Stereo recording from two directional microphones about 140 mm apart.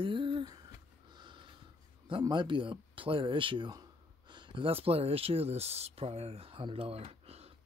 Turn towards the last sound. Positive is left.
turn(degrees=-45)  # may be behind; listen again after turning